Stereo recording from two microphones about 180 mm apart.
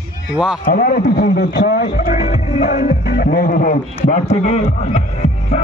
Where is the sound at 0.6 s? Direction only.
55° left (ahead or behind).